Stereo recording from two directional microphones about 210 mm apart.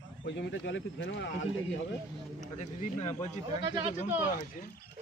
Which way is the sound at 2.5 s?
35° left (ahead or behind).